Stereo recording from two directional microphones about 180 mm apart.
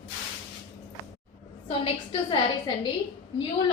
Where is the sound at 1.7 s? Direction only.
30° left (ahead or behind).